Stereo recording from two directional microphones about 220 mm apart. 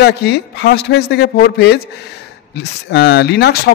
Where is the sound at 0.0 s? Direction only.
50° left (ahead or behind).